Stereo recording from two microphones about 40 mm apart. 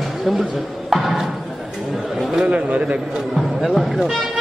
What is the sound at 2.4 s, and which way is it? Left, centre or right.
Speech, right.